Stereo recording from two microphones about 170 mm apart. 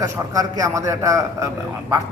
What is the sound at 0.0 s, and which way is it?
A man's voice, 20° right (ahead or behind).